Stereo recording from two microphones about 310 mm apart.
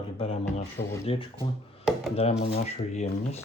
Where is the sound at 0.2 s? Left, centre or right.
Centre.